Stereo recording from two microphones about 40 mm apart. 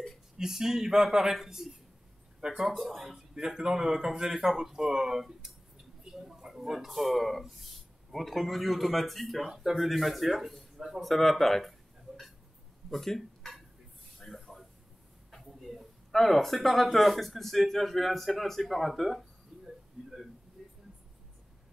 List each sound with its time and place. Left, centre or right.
0.4 s speech: centre
2.7 s speech: centre
3.4 s speech: centre
12.9 s speech: centre
14.2 s a sound: centre
15.3 s speech: centre
19.5 s a sound: centre
20.0 s whimper: right
20.6 s a sound: centre